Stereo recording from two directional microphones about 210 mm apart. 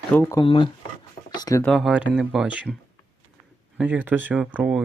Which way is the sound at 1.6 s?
Centre (ahead or behind).